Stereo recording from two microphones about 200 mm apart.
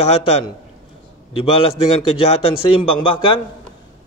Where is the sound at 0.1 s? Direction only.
30° left (ahead or behind).